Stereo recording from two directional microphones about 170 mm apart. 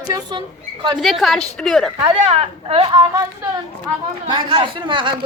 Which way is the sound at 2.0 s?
40° right (ahead or behind).